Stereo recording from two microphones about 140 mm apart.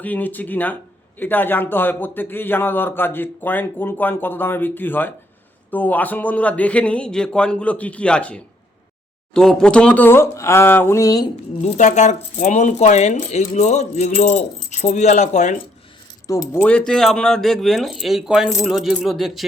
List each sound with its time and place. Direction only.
0.0 s a man's voice: 10° left (ahead or behind)
11.6 s speech: 55° left (ahead or behind)
16.5 s speech: 10° left (ahead or behind)